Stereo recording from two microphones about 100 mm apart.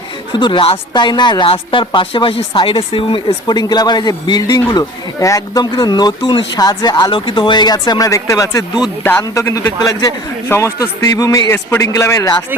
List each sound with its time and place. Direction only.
0.3 s speech: 55° left (ahead or behind)
0.9 s speech: 50° left (ahead or behind)
5.7 s a man's voice: 45° left (ahead or behind); by 12.3 s 30° left (ahead or behind)